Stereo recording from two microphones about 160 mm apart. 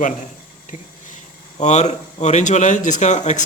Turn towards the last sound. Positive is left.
turn(degrees=45)  # may be behind; listen again after turning